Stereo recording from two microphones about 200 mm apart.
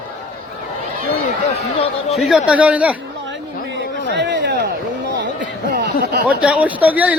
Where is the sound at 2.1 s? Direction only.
Centre (ahead or behind).